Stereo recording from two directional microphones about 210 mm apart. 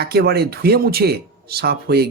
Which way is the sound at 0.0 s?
50° right (ahead or behind).